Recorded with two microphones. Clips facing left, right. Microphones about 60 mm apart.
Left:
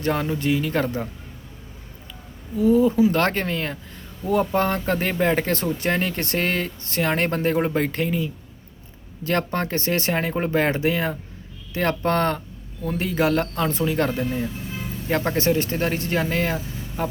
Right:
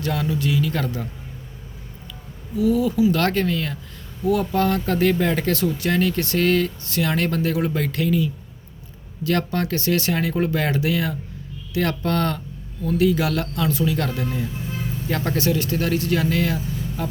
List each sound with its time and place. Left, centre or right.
0.0 s speech: left
2.6 s speech: left
17.0 s a sound: left